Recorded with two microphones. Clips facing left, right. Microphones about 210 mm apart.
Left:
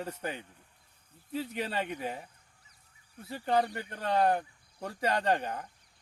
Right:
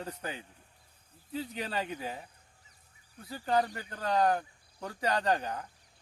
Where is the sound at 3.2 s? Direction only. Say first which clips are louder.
Left 1 dB; 25° left (ahead or behind).